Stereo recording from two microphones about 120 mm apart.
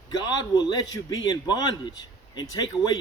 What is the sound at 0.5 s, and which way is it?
A man's voice, 35° left (ahead or behind).